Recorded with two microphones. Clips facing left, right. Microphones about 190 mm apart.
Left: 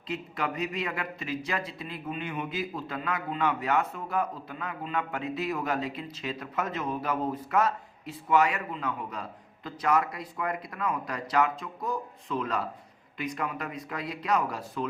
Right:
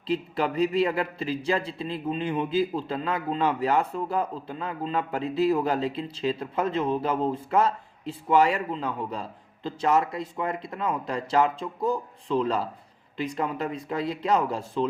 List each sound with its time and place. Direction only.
0.1 s a man's voice: 30° right (ahead or behind)